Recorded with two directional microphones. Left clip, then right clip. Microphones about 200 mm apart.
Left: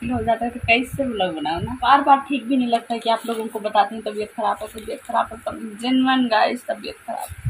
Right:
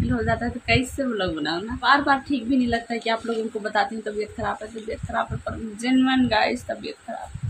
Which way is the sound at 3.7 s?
10° right (ahead or behind).